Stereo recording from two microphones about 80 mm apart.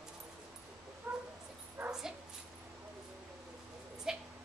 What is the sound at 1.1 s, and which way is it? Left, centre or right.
Cat, right.